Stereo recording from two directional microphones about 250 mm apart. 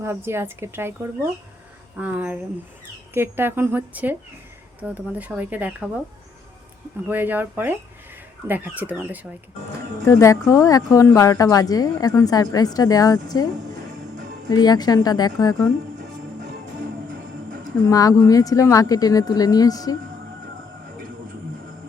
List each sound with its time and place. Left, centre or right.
0.0 s speech: centre
2.0 s speech: centre
7.1 s speech: centre
10.1 s speech: centre
14.5 s speech: centre
17.8 s speech: centre